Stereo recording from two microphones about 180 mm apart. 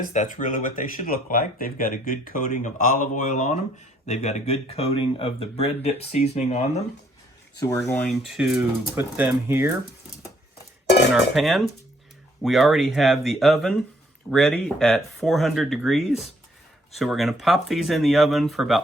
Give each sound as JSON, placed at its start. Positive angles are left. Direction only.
{"t": 0.0, "sound": "speech", "side_deg": 45}
{"t": 7.9, "sound": "speech", "side_deg": 10}
{"t": 8.4, "sound": "speech", "side_deg": -5}
{"t": 11.1, "sound": "speech", "side_deg": 0}